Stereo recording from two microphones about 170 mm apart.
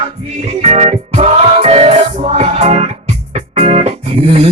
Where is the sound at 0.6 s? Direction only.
40° right (ahead or behind).